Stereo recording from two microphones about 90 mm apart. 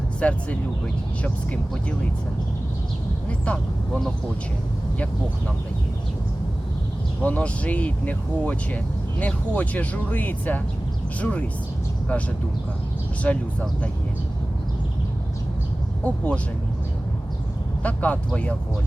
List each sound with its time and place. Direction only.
0.2 s speech: 15° left (ahead or behind)
3.2 s speech: 15° left (ahead or behind)
7.2 s speech: 15° left (ahead or behind)
13.2 s speech: 15° left (ahead or behind)
16.0 s speech: 15° left (ahead or behind)
17.8 s speech: 15° left (ahead or behind)